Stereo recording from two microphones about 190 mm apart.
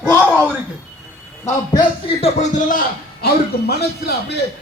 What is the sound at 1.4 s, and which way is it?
A man's voice, 20° left (ahead or behind).